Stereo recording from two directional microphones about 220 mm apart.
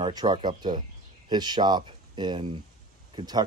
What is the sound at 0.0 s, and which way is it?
Speech, 20° right (ahead or behind).